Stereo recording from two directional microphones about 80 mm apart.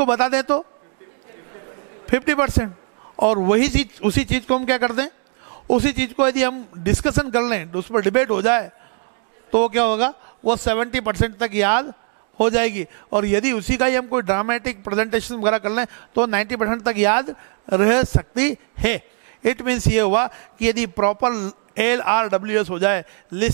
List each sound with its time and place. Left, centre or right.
0.0 s a man's voice: centre
2.0 s a man's voice: centre